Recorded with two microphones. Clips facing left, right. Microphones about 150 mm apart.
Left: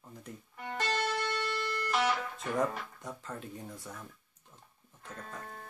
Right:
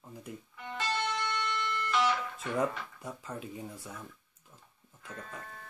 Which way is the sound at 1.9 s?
55° left (ahead or behind).